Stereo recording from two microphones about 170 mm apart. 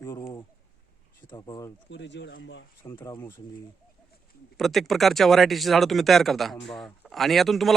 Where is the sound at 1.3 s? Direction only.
20° left (ahead or behind).